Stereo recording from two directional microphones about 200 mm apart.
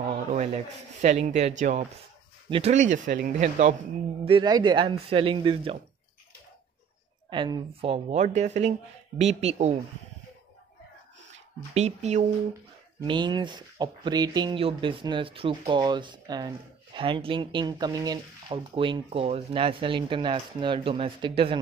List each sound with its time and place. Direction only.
0.1 s rub: 35° right (ahead or behind)
1.0 s speech: 35° right (ahead or behind)
4.3 s speech: 20° right (ahead or behind)
7.2 s speech: 20° right (ahead or behind)
11.7 s speech: 35° right (ahead or behind)
13.0 s speech: 25° right (ahead or behind)